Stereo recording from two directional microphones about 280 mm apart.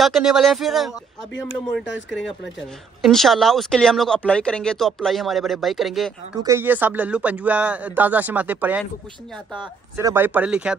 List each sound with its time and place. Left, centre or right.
0.0 s speech: centre
1.9 s speech: left
3.0 s speech: centre